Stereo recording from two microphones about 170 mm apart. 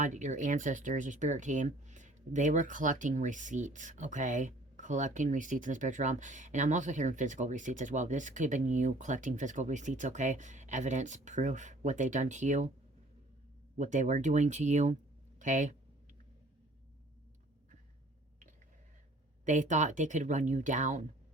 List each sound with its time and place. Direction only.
0.0 s speech: 45° right (ahead or behind)
13.7 s speech: 45° right (ahead or behind)
19.5 s speech: 45° right (ahead or behind)